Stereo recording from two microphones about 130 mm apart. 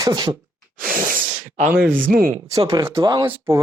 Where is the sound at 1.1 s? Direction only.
70° right (ahead or behind).